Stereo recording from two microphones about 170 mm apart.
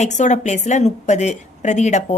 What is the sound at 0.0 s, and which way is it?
A woman's voice, 45° left (ahead or behind).